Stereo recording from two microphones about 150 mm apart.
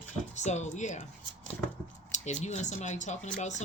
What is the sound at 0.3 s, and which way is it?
Speech, 50° left (ahead or behind).